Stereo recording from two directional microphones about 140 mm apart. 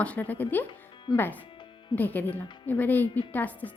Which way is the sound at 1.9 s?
10° left (ahead or behind).